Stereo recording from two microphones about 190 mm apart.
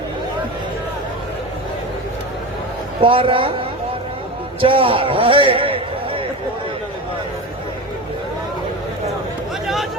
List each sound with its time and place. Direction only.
3.0 s a man's voice: 30° right (ahead or behind)
4.6 s a man's voice: 30° right (ahead or behind)